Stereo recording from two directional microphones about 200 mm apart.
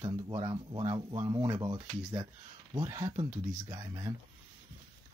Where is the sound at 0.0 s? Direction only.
25° right (ahead or behind).